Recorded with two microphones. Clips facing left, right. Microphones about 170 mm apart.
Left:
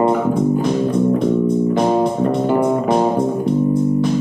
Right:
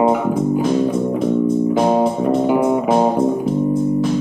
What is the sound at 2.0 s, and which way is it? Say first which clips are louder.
Music: right 1 dB; 5° right (ahead or behind).